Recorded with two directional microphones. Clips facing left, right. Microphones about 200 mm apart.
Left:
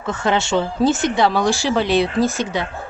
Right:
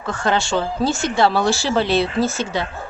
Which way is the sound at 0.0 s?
20° left (ahead or behind).